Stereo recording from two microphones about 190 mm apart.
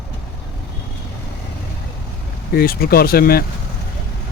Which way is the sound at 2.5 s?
50° left (ahead or behind).